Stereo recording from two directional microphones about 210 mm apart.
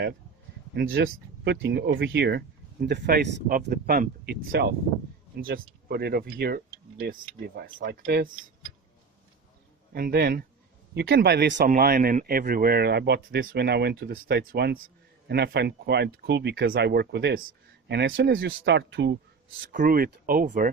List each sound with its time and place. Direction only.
0.7 s speech: 45° right (ahead or behind)
9.9 s speech: 45° right (ahead or behind)
19.7 s speech: 40° right (ahead or behind)